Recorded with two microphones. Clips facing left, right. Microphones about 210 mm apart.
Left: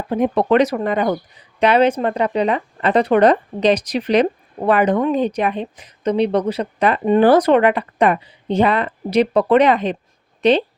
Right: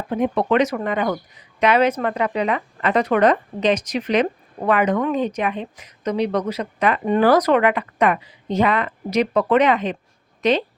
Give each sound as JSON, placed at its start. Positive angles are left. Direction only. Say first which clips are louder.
{"t": 0.1, "sound": "speech", "louder": "left 3 dB", "side_deg": 35}